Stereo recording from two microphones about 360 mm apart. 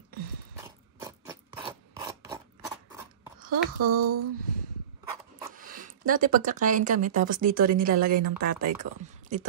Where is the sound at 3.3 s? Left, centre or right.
Right.